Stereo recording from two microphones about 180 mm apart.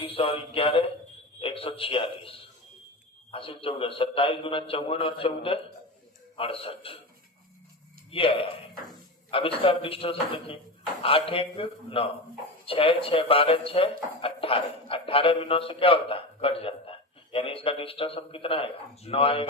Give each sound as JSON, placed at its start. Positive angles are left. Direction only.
{"t": 0.0, "sound": "music", "side_deg": 30}
{"t": 1.4, "sound": "speech", "side_deg": 30}
{"t": 8.1, "sound": "speech", "side_deg": 30}